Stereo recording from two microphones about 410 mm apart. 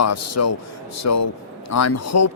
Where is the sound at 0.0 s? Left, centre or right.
Left.